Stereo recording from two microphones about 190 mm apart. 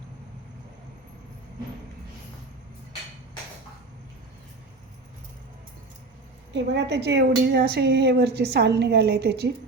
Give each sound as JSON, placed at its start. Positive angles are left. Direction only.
{"t": 6.5, "sound": "a woman's voice", "side_deg": -65}